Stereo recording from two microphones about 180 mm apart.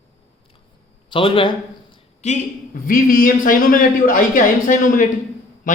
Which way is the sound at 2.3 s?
50° left (ahead or behind).